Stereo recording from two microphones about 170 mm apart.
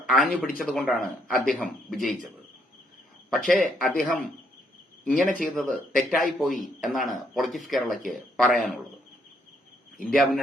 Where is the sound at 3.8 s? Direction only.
55° left (ahead or behind).